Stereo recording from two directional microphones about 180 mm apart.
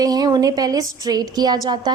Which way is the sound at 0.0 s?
20° right (ahead or behind).